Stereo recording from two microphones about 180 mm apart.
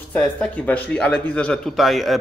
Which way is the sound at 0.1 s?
5° left (ahead or behind).